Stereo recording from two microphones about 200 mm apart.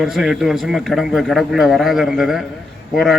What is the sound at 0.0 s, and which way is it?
A man's voice, centre (ahead or behind).